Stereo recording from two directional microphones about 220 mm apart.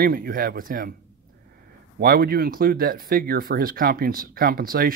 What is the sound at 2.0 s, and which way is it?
Speech, 45° right (ahead or behind).